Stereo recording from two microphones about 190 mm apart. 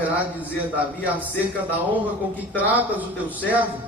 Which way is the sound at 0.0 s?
10° right (ahead or behind).